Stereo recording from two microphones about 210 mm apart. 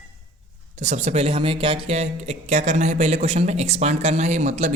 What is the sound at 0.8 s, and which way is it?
Speech, 30° right (ahead or behind).